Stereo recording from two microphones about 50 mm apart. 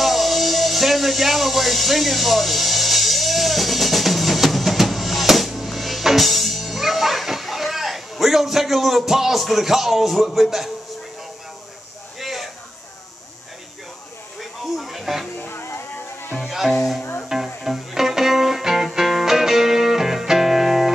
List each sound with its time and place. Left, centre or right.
0.0 s music: centre
12.2 s a sound: centre
14.8 s music: centre
15.4 s music: left
16.3 s music: centre